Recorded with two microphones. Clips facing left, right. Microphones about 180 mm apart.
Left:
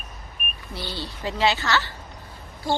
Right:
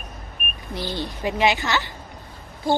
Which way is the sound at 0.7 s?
15° right (ahead or behind).